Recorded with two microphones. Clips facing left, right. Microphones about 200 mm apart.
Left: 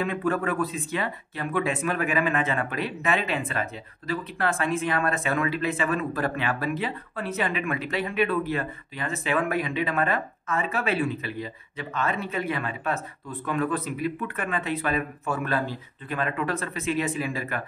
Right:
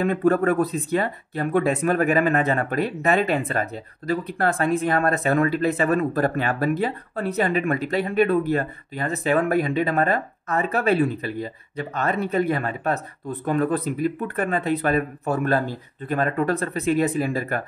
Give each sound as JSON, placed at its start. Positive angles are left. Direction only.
{"t": 0.0, "sound": "speech", "side_deg": -40}